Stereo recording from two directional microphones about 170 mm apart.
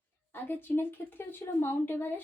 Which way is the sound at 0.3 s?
15° left (ahead or behind).